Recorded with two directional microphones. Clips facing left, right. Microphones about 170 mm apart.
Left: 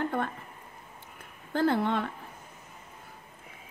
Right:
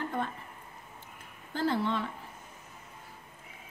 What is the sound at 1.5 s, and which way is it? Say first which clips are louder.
Speech: left 4 dB; 55° left (ahead or behind).